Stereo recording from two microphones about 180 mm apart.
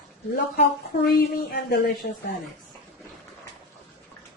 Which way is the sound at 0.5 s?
60° left (ahead or behind).